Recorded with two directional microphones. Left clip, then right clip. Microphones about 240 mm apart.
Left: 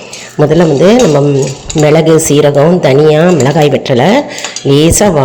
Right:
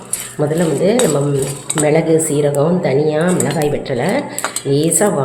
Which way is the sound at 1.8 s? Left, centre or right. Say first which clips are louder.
Left 7 dB; left.